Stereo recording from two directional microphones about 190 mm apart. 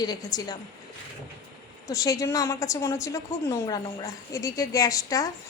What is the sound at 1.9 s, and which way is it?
A woman's voice, 20° left (ahead or behind).